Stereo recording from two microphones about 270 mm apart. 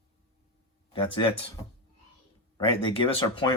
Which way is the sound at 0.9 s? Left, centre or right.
Centre.